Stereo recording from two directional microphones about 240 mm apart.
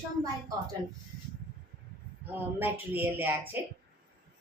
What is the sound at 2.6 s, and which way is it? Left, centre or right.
A woman's voice, centre.